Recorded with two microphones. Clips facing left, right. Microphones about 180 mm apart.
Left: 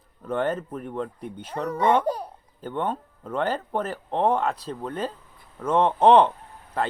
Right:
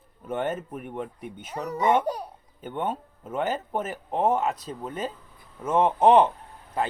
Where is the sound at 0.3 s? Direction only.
10° right (ahead or behind).